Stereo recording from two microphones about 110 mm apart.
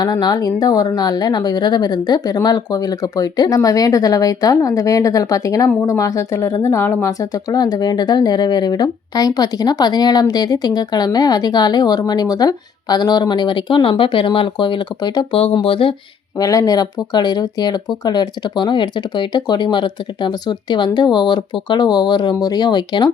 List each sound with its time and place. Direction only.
0.0 s speech: 40° left (ahead or behind)
15.3 s speech: 65° left (ahead or behind)
15.5 s speech: 55° left (ahead or behind)
16.4 s speech: 30° left (ahead or behind)